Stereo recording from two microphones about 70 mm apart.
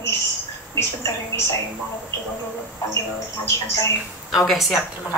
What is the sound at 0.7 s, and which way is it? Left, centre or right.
Speech, left.